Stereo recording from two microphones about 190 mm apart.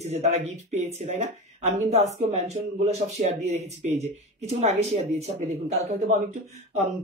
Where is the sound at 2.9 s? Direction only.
35° right (ahead or behind).